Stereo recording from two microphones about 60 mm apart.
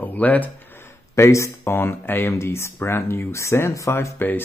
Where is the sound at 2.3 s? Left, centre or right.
Left.